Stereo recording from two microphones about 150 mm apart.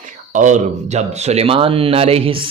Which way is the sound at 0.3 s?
55° right (ahead or behind).